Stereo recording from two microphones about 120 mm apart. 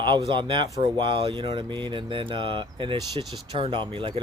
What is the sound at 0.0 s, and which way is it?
Speech, 40° right (ahead or behind).